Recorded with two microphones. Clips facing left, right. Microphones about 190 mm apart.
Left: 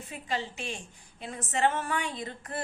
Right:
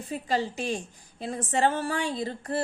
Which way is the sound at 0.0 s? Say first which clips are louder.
Right 6 dB; 35° right (ahead or behind).